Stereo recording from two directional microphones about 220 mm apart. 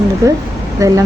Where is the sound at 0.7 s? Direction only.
15° right (ahead or behind).